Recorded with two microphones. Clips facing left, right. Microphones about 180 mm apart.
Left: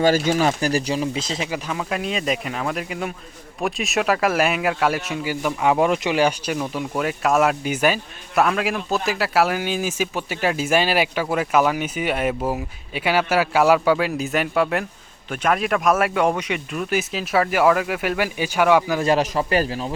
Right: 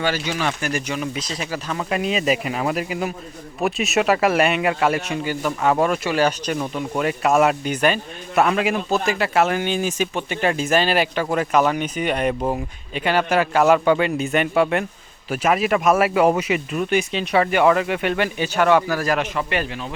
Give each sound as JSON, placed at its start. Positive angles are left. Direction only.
{"t": 0.0, "sound": "speech", "side_deg": 40}
{"t": 1.9, "sound": "speech", "side_deg": 0}
{"t": 18.9, "sound": "speech", "side_deg": 30}